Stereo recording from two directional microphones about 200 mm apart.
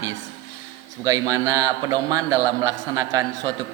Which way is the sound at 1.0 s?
20° right (ahead or behind).